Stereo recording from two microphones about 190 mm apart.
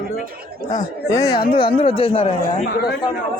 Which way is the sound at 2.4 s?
50° left (ahead or behind).